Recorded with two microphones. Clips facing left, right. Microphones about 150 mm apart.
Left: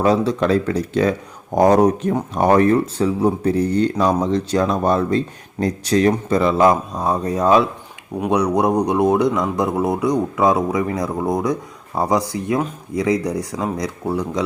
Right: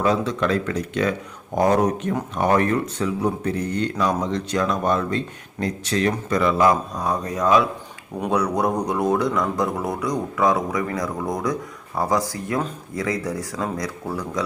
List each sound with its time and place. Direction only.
0.0 s speech: 35° left (ahead or behind)
8.3 s speech: 20° left (ahead or behind)